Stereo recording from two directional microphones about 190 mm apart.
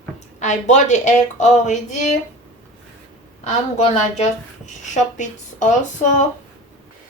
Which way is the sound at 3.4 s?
35° left (ahead or behind).